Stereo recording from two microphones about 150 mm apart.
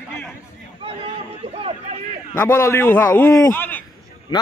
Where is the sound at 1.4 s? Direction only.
40° right (ahead or behind).